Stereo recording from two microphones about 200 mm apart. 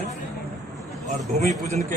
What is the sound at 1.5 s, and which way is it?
Speech, 35° right (ahead or behind).